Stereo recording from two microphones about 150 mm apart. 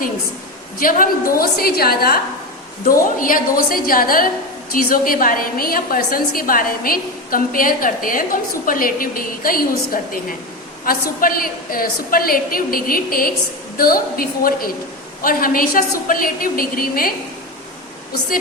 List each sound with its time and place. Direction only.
0.8 s a woman's voice: 70° left (ahead or behind); by 2.1 s 90° left
2.8 s a woman's voice: 65° left (ahead or behind)